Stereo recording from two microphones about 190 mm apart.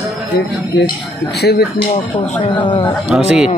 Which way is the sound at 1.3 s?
60° left (ahead or behind).